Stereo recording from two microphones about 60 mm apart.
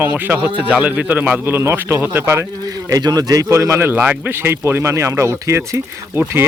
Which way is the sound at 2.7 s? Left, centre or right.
Right.